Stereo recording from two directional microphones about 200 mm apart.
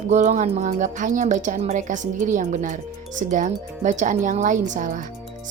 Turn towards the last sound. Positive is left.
turn(degrees=-40)  # may be behind; listen again after turning